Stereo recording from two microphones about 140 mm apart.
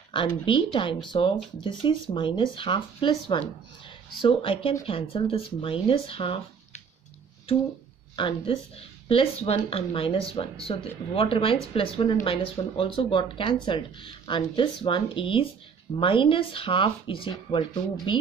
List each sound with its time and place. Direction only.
0.1 s speech: 35° left (ahead or behind)
8.2 s speech: 40° left (ahead or behind)